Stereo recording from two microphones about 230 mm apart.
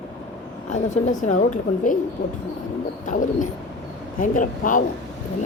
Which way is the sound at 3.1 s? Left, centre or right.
Left.